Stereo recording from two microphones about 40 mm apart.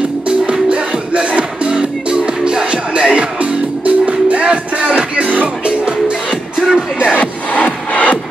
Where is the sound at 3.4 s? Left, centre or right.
Right.